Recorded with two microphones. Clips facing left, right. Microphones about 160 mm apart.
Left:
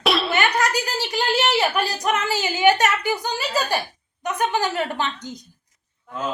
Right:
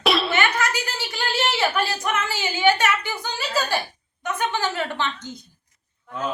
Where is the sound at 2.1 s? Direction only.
40° left (ahead or behind).